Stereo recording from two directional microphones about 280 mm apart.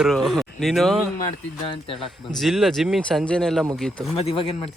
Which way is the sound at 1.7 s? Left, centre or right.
Centre.